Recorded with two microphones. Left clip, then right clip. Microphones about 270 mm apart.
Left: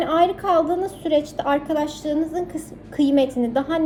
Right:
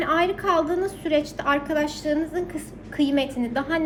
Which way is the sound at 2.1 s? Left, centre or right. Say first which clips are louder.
Left 2 dB; left.